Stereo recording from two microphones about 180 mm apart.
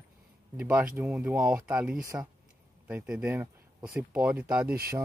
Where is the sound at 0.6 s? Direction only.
10° right (ahead or behind).